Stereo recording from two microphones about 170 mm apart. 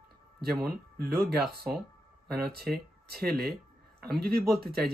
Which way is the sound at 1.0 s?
65° right (ahead or behind).